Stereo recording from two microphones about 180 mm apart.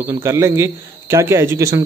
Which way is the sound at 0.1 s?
15° right (ahead or behind).